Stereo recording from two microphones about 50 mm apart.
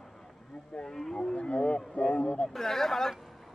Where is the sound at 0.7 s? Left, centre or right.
Centre.